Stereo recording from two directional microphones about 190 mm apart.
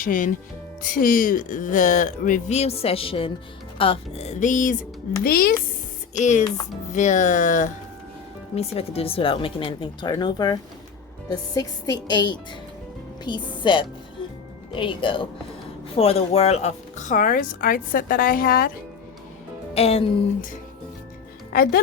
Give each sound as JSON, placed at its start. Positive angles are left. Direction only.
{"t": 0.0, "sound": "a woman's voice", "side_deg": 45}
{"t": 6.1, "sound": "a woman's voice", "side_deg": 40}
{"t": 19.7, "sound": "speech", "side_deg": 30}
{"t": 21.5, "sound": "speech", "side_deg": 50}